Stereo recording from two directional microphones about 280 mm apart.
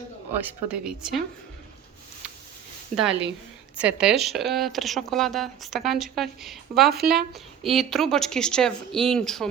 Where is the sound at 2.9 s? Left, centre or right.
Right.